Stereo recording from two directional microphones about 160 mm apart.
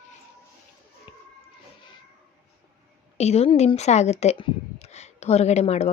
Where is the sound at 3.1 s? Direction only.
40° left (ahead or behind).